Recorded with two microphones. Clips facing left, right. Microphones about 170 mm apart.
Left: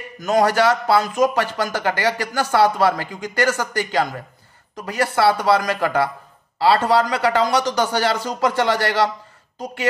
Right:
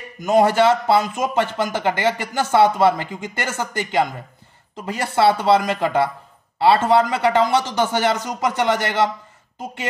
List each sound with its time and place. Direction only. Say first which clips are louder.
0.3 s a man's voice: right 2 dB; 25° right (ahead or behind)